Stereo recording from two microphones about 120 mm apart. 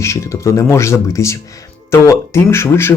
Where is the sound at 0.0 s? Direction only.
25° left (ahead or behind).